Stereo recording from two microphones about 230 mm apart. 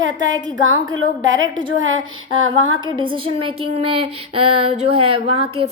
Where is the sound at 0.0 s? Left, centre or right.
Right.